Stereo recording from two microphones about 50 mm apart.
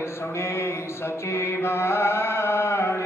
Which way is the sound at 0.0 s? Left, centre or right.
Left.